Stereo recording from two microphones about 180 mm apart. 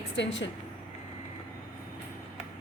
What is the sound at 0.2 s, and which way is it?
Speech, 85° left.